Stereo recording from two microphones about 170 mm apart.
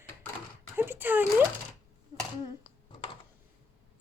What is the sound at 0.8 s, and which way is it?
Speech, 10° right (ahead or behind).